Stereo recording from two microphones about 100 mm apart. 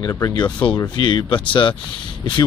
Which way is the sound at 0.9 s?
55° left (ahead or behind).